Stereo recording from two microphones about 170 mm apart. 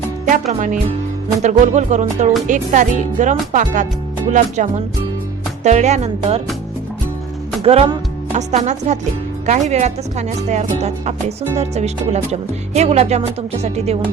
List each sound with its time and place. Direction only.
1.4 s speech: 45° right (ahead or behind)
7.6 s speech: 35° right (ahead or behind)